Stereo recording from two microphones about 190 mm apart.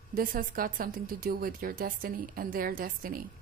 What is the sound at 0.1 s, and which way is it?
A woman's voice, 45° right (ahead or behind).